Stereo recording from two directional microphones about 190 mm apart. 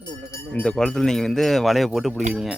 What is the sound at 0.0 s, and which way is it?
Speech, 15° left (ahead or behind).